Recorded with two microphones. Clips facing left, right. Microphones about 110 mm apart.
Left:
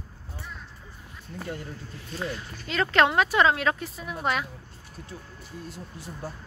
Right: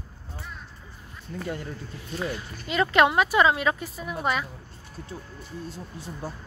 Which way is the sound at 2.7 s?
10° right (ahead or behind).